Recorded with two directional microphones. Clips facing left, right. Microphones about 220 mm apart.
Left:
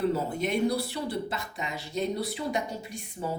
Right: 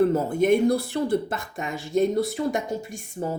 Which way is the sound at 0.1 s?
50° right (ahead or behind).